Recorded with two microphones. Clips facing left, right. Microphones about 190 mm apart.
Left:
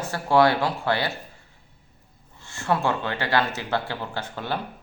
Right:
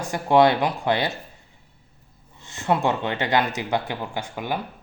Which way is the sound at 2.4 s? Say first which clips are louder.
Right 2 dB; 20° right (ahead or behind).